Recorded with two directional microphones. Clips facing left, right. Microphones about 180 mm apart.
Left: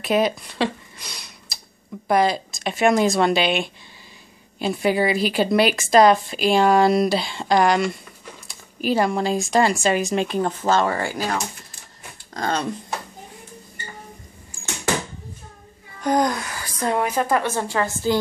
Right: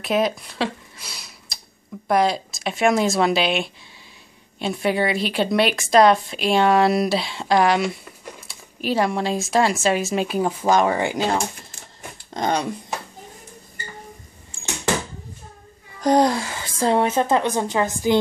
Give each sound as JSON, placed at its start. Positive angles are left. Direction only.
{"t": 0.0, "sound": "speech", "side_deg": 0}
{"t": 16.0, "sound": "a woman's voice", "side_deg": -30}